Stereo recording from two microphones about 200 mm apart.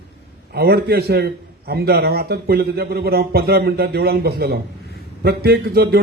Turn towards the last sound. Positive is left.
turn(degrees=-50)  # may be behind; listen again after turning